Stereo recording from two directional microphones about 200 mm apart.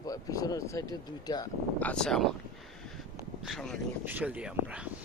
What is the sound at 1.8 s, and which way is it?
Speech, 5° left (ahead or behind).